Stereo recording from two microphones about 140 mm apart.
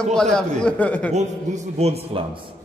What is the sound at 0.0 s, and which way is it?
A man's voice, 5° left (ahead or behind).